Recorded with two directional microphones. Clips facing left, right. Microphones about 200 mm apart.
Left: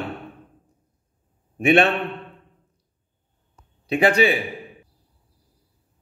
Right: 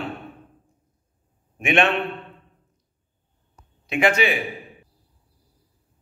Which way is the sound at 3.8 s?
35° left (ahead or behind).